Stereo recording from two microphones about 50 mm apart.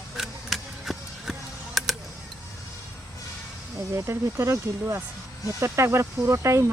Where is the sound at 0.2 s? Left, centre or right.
Centre.